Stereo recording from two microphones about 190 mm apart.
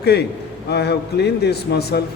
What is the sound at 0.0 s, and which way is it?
A man's voice, 60° left (ahead or behind).